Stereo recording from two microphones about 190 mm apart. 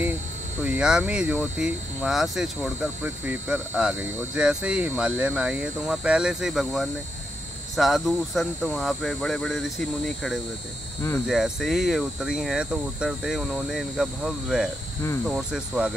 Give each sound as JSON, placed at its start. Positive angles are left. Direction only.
{"t": 0.7, "sound": "speech", "side_deg": -5}